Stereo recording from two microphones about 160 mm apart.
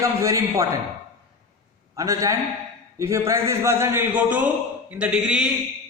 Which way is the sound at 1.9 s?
20° right (ahead or behind).